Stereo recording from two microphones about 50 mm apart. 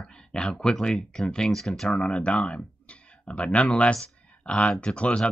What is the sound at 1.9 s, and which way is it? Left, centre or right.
Speech, left.